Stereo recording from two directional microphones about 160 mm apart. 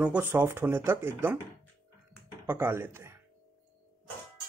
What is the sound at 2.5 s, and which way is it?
Speech, 15° right (ahead or behind).